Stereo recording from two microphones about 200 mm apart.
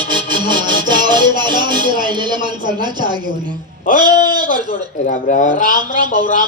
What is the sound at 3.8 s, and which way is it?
Speech, 40° left (ahead or behind).